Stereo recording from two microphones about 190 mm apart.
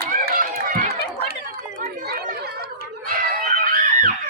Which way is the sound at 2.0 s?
55° right (ahead or behind).